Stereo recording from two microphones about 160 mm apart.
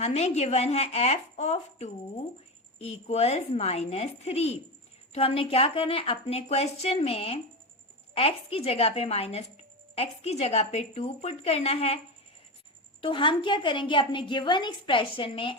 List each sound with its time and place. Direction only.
0.0 s a woman's voice: 40° left (ahead or behind)
13.0 s a woman's voice: 30° left (ahead or behind)